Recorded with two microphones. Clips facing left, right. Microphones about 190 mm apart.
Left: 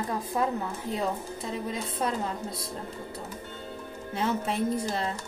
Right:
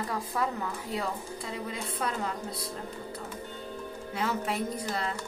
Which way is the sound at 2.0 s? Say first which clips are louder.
Left 4 dB; 30° left (ahead or behind).